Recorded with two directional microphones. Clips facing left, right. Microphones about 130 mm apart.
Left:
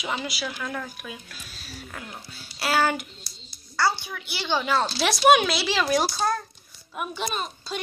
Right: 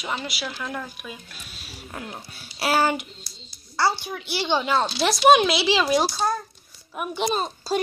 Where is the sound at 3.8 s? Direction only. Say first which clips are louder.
Right 2 dB; 30° right (ahead or behind).